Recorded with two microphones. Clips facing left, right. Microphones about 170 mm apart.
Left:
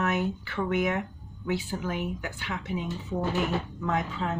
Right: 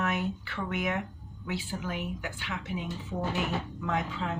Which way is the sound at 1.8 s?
45° left (ahead or behind).